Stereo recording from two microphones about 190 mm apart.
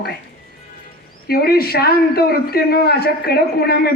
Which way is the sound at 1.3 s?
55° left (ahead or behind).